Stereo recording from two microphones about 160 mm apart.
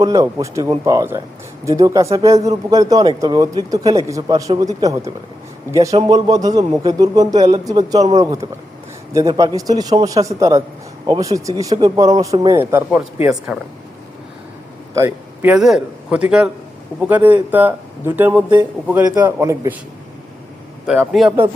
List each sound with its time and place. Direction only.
0.0 s a man's voice: 20° right (ahead or behind)
14.9 s a man's voice: 15° right (ahead or behind)
20.8 s a man's voice: centre (ahead or behind)